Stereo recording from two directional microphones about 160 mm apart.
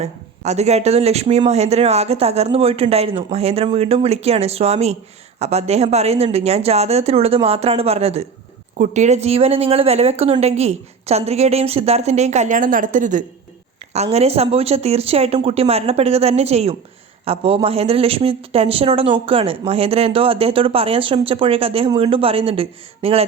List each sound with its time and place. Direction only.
0.0 s speech: 45° right (ahead or behind)
13.9 s speech: 40° right (ahead or behind)